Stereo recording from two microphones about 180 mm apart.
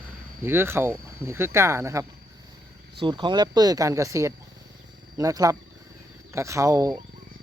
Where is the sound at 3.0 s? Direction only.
25° right (ahead or behind).